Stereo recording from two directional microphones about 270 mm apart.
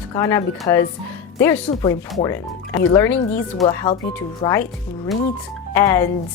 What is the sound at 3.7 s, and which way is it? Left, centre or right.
Speech, centre.